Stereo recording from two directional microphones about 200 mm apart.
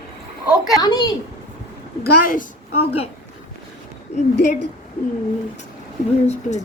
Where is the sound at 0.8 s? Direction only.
20° left (ahead or behind).